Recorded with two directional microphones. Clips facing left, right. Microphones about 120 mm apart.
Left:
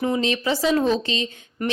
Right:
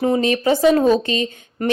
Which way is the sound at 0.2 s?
50° right (ahead or behind).